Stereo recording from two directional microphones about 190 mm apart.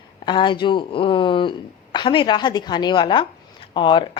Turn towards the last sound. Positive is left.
turn(degrees=25)  # may be behind; listen again after turning